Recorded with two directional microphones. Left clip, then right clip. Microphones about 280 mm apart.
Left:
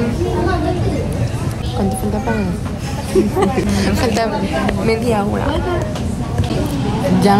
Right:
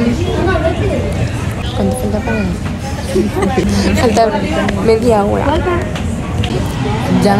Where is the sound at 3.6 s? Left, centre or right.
Centre.